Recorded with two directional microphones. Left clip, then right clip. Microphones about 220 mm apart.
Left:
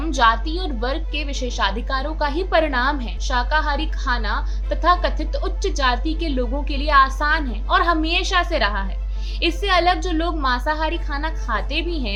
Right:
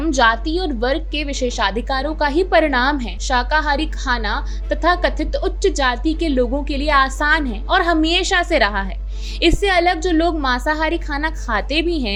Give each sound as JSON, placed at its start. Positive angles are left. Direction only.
{"t": 0.0, "sound": "a woman's voice", "side_deg": -25}